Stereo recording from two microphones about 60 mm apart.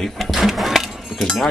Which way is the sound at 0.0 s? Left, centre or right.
Centre.